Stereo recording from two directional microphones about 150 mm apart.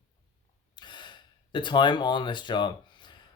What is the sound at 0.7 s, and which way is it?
Gasp, 30° left (ahead or behind).